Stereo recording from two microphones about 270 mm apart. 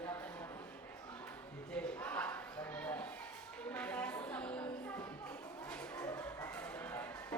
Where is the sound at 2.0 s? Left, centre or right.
Centre.